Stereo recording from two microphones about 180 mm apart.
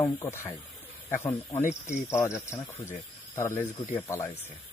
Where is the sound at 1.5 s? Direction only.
45° left (ahead or behind).